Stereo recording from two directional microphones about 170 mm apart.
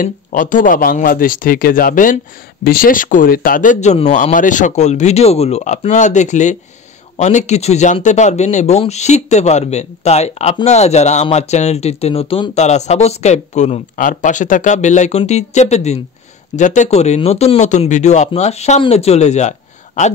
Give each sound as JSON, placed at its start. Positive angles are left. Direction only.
{"t": 0.0, "sound": "a man's voice", "side_deg": 50}